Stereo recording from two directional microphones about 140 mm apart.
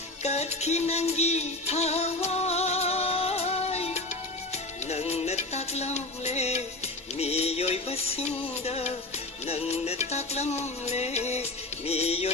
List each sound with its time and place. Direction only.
0.2 s music: 50° left (ahead or behind)